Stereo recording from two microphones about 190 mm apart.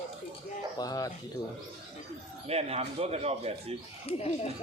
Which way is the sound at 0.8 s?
20° left (ahead or behind).